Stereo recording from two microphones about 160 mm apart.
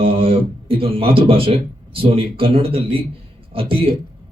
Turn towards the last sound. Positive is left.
turn(degrees=-35)  # may be behind; listen again after turning